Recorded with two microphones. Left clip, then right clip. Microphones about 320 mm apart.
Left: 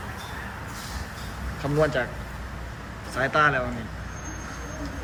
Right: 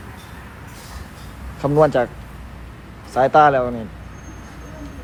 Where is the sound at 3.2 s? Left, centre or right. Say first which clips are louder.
Right 9 dB; centre.